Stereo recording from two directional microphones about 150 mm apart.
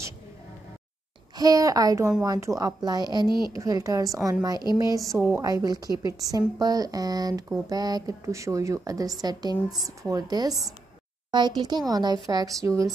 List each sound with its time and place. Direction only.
1.3 s a woman's voice: 25° right (ahead or behind)